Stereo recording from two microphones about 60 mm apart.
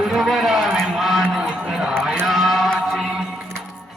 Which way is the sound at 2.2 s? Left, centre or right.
Centre.